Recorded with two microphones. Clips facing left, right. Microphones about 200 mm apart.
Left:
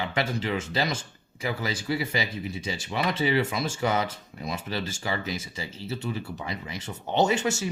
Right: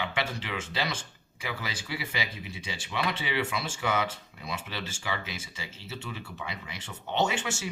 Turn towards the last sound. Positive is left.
turn(degrees=40)  # may be behind; listen again after turning